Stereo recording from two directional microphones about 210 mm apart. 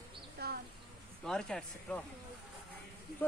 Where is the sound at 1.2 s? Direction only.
5° left (ahead or behind).